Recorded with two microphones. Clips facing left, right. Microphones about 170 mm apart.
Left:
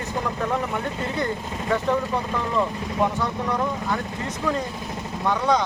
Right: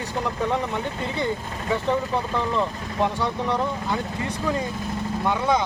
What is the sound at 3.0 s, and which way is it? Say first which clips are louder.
Speech: right 1 dB; 25° right (ahead or behind).